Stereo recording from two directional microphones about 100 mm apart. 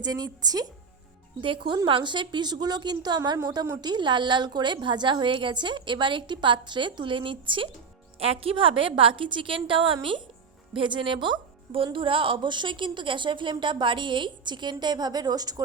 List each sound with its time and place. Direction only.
0.0 s a woman's voice: 40° right (ahead or behind)
1.4 s a woman's voice: 55° right (ahead or behind)
8.2 s a woman's voice: 75° right (ahead or behind); by 15.6 s 40° right (ahead or behind)